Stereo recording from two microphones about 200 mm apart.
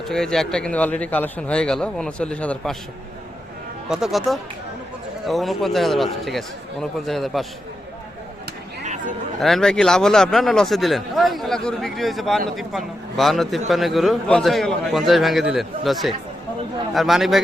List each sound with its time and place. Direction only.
0.0 s a man's voice: 5° left (ahead or behind)
3.8 s a man's voice: 5° right (ahead or behind)
8.8 s a sound: 35° right (ahead or behind)
9.4 s a man's voice: centre (ahead or behind)